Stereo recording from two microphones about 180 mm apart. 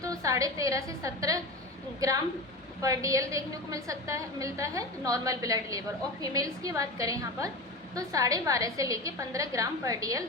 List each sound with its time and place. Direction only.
0.0 s a woman's voice: 20° right (ahead or behind)